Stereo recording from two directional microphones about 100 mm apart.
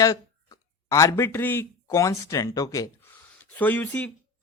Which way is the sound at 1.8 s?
35° left (ahead or behind).